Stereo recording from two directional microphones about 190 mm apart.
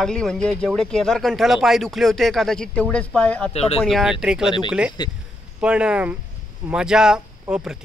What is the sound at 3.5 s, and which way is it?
Speech, 35° left (ahead or behind).